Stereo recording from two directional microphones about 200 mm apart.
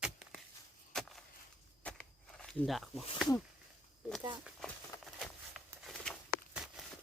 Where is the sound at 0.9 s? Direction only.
5° left (ahead or behind).